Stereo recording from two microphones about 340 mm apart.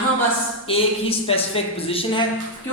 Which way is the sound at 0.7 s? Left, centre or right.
Centre.